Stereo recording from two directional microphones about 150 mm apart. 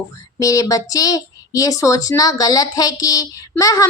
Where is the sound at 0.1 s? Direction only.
20° left (ahead or behind).